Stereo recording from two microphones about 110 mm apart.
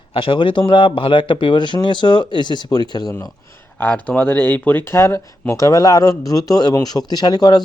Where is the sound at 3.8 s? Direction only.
15° left (ahead or behind).